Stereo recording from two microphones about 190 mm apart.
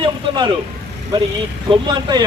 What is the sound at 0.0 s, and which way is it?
Vehicle, 25° right (ahead or behind).